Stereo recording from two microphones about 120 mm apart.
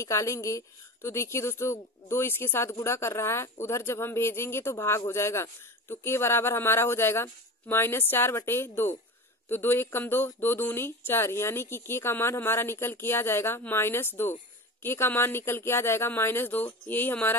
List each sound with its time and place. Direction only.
0.0 s speech: 25° left (ahead or behind)